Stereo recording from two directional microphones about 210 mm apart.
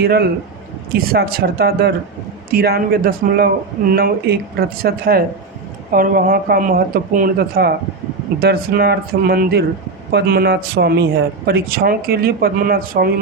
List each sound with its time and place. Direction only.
0.0 s speech: 50° right (ahead or behind)